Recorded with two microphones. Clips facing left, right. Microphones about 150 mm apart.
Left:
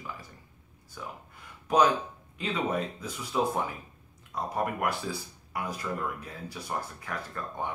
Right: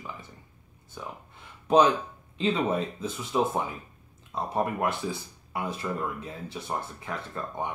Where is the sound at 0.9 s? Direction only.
25° right (ahead or behind).